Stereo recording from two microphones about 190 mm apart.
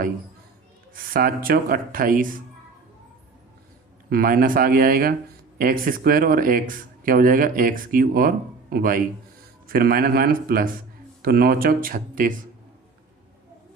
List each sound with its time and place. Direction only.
0.9 s speech: 50° right (ahead or behind)
4.1 s speech: 50° right (ahead or behind)